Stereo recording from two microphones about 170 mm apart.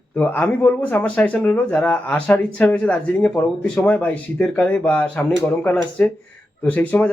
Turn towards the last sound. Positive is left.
turn(degrees=10)  # may be behind; listen again after turning